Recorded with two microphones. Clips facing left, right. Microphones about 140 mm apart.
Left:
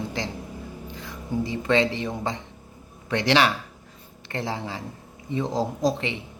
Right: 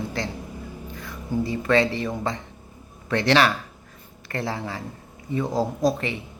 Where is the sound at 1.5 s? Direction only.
20° left (ahead or behind).